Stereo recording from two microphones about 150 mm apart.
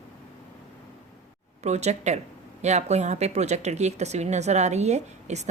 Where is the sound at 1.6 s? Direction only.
50° right (ahead or behind).